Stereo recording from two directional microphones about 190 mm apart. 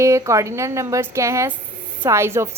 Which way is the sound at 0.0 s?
15° right (ahead or behind).